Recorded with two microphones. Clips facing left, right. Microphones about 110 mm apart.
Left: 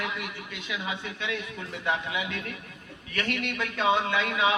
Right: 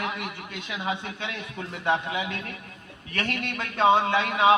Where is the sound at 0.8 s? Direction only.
45° right (ahead or behind).